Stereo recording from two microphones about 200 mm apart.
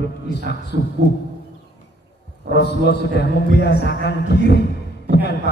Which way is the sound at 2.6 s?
55° left (ahead or behind).